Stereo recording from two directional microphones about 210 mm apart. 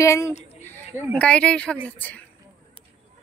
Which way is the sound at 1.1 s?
5° left (ahead or behind).